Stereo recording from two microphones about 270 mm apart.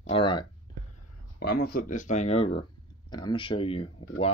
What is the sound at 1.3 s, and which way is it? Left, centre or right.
Speech, left.